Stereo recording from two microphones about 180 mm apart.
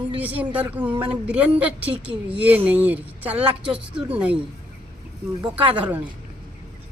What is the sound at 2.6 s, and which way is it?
Speech, 10° right (ahead or behind).